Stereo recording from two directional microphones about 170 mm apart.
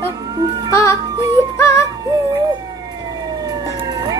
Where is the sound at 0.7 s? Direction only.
15° left (ahead or behind).